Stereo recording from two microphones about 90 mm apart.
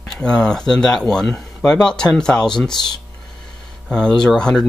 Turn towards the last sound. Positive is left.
turn(degrees=5)  # may be behind; listen again after turning